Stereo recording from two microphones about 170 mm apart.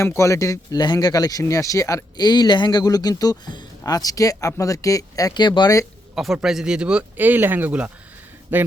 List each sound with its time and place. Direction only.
0.0 s speech: 15° left (ahead or behind)
6.1 s speech: centre (ahead or behind)